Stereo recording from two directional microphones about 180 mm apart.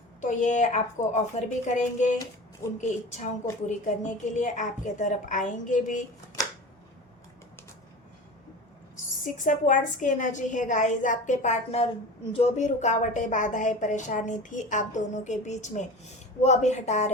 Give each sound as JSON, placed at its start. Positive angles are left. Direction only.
{"t": 0.2, "sound": "a woman's voice", "side_deg": 40}
{"t": 9.2, "sound": "a woman's voice", "side_deg": 45}